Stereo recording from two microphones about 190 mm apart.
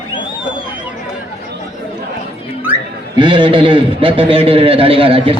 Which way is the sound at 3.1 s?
25° right (ahead or behind).